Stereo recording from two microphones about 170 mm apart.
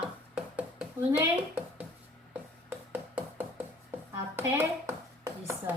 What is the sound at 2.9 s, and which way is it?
Music, 10° right (ahead or behind).